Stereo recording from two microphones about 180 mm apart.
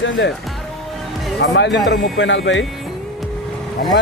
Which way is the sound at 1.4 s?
80° left.